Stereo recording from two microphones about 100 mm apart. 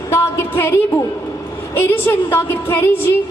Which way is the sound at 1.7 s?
20° left (ahead or behind).